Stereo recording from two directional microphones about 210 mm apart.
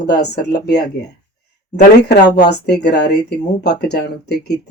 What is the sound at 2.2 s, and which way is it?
Speech, 55° left (ahead or behind).